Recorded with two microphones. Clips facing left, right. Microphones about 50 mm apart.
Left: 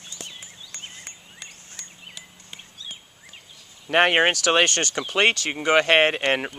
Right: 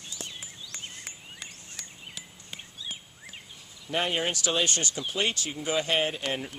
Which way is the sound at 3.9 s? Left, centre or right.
Left.